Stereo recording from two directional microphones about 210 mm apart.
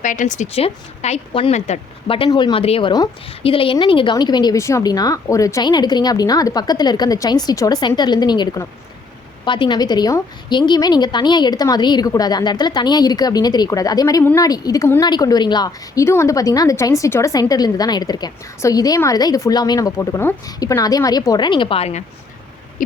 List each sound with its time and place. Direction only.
0.0 s a woman's voice: 40° left (ahead or behind)